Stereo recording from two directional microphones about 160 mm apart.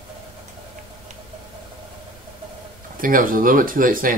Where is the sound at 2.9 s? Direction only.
60° right (ahead or behind).